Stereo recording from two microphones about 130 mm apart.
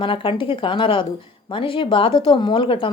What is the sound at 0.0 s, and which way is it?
A woman's voice, 40° left (ahead or behind).